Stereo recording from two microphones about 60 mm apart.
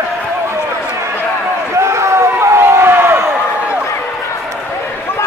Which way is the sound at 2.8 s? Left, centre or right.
Right.